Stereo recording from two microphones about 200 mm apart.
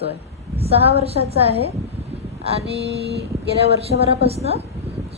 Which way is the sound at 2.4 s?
30° right (ahead or behind).